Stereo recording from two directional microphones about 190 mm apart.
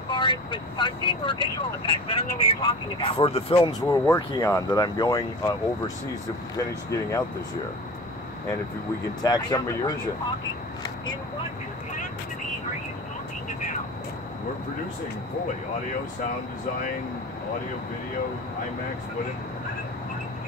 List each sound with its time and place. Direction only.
0.1 s speech: 25° left (ahead or behind)
3.8 s speech: 10° left (ahead or behind)
6.9 s speech: 15° left (ahead or behind)
9.2 s speech: 20° left (ahead or behind)